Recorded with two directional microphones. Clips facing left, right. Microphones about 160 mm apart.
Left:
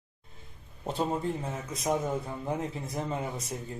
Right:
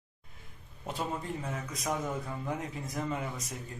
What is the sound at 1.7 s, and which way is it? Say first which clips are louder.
Speech: left 6 dB; 25° left (ahead or behind).